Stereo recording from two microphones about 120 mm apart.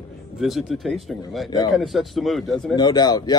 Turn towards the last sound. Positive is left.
turn(degrees=35)  # may be behind; listen again after turning